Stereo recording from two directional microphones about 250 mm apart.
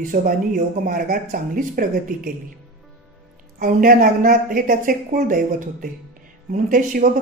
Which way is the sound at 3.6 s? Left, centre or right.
Right.